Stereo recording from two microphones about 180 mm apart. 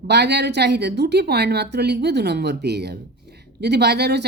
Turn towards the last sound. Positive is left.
turn(degrees=-65)  # may be behind; listen again after turning